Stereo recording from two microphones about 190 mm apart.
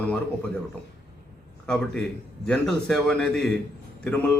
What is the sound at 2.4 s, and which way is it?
A man's voice, 5° left (ahead or behind).